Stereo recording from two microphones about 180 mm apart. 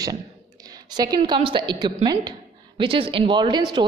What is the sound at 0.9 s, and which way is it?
A woman's voice, 20° right (ahead or behind).